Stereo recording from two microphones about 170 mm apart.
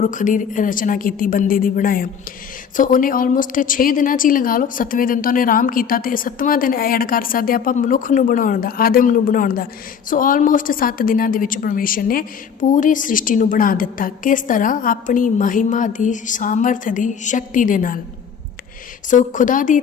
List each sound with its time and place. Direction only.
0.0 s a woman's voice: 50° left (ahead or behind)
19.1 s a woman's voice: 50° left (ahead or behind)